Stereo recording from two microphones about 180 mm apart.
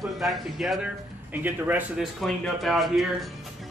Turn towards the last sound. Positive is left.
turn(degrees=0)  # may be behind; listen again after turning